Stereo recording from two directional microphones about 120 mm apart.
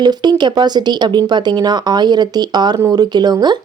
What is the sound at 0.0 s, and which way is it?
Speech, 35° right (ahead or behind).